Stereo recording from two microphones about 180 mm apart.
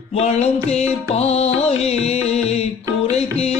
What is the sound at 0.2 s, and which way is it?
Music, 35° left (ahead or behind).